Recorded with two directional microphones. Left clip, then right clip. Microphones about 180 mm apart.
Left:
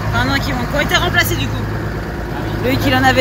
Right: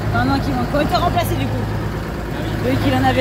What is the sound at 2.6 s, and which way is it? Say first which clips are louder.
Speech: left 4 dB; 10° right (ahead or behind).